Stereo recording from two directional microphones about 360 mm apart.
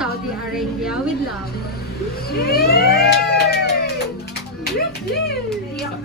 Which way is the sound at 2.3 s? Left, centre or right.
Left.